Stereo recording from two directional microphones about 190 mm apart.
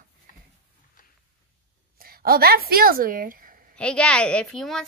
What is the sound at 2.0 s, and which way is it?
A woman's voice, 50° right (ahead or behind).